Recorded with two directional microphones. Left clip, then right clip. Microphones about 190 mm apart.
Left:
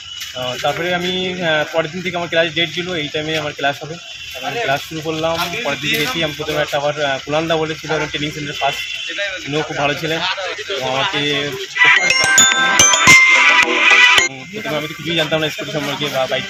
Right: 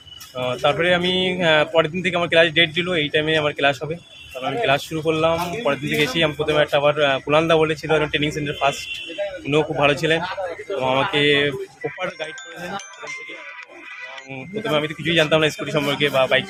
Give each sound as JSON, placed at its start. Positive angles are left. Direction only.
{"t": 0.6, "sound": "a man's voice", "side_deg": -25}
{"t": 11.9, "sound": "music", "side_deg": 50}
{"t": 14.7, "sound": "a man's voice", "side_deg": -25}